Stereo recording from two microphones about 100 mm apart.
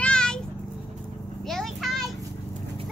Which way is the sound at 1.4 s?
Centre (ahead or behind).